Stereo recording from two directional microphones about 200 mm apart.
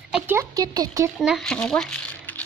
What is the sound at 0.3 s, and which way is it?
Speech, 15° right (ahead or behind).